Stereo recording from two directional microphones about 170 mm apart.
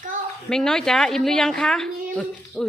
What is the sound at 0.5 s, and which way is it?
A woman's voice, 5° left (ahead or behind).